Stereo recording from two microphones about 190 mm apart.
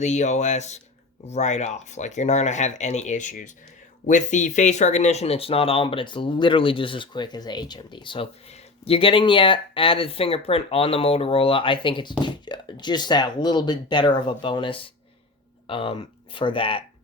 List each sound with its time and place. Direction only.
0.0 s speech: 35° left (ahead or behind)